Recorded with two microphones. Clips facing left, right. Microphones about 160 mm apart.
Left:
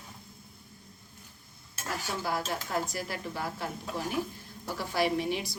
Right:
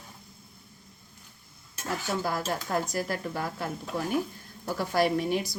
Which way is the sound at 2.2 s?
45° right (ahead or behind).